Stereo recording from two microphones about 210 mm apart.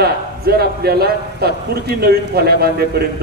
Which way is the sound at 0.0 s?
45° right (ahead or behind).